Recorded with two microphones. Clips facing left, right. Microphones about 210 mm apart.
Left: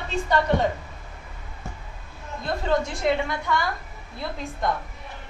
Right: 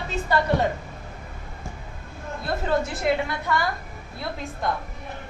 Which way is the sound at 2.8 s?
5° right (ahead or behind).